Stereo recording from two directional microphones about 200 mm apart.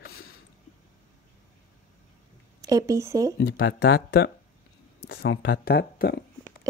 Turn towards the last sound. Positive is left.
turn(degrees=50)  # may be behind; listen again after turning